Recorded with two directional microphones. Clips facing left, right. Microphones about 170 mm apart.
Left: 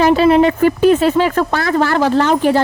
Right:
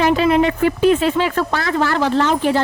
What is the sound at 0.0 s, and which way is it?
Speech, 35° left (ahead or behind).